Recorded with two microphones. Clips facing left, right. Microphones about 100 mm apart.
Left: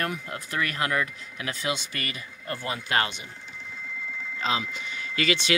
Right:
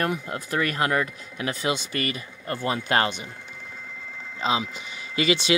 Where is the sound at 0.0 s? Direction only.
25° right (ahead or behind).